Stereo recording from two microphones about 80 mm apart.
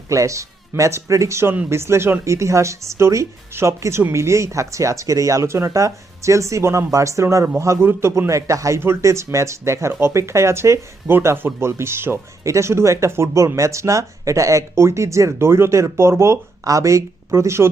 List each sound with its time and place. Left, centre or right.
0.1 s speech: right